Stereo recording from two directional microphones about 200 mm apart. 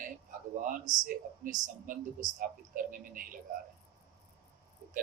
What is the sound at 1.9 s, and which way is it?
Speech, 45° right (ahead or behind).